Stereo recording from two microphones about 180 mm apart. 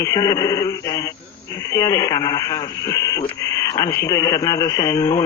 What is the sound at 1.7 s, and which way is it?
Speech, 15° left (ahead or behind).